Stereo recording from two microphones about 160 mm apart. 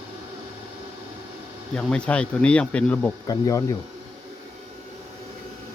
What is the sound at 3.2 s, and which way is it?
Speech, 25° left (ahead or behind).